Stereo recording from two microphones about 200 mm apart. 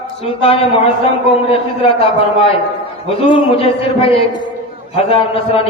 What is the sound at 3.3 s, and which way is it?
A man's voice, 25° left (ahead or behind).